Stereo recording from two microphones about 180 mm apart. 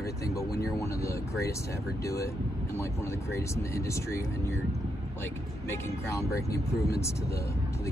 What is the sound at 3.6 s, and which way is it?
Speech, 15° left (ahead or behind).